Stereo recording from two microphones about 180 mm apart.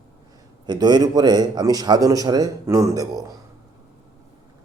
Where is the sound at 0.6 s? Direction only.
25° right (ahead or behind).